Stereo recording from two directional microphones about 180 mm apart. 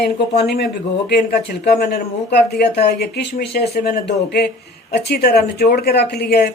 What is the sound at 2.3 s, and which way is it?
Speech, 65° left (ahead or behind).